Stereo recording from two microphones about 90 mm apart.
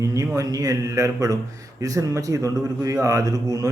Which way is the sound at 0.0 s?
35° right (ahead or behind).